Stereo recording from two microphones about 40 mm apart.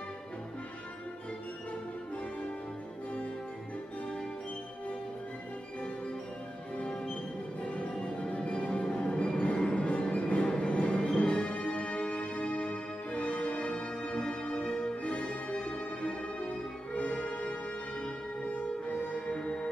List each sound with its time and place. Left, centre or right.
7.6 s music: left
7.9 s music: left
19.1 s music: left